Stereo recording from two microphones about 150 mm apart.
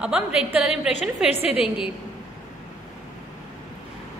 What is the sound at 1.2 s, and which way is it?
Speech, 40° left (ahead or behind).